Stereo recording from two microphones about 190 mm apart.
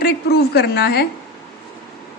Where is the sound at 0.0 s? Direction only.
55° left (ahead or behind).